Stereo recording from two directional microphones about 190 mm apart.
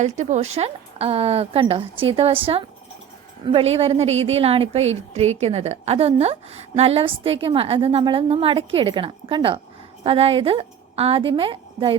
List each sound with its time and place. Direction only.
0.0 s a woman's voice: 40° right (ahead or behind)